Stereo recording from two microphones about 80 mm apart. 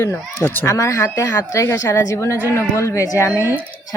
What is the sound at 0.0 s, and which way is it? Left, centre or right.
Speech, left.